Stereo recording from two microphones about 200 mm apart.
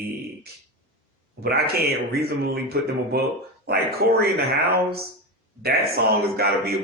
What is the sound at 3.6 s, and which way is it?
Speech, 50° right (ahead or behind).